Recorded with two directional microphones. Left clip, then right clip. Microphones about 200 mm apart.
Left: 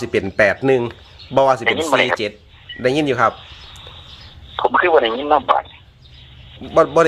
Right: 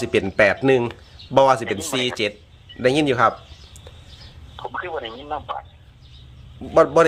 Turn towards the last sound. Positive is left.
turn(degrees=5)  # may be behind; listen again after turning